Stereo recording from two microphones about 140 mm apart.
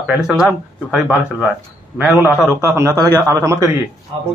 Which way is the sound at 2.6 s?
20° right (ahead or behind).